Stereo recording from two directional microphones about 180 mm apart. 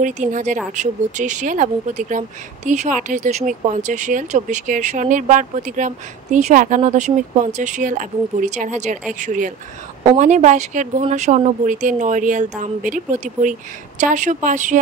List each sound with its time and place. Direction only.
0.0 s speech: 45° right (ahead or behind)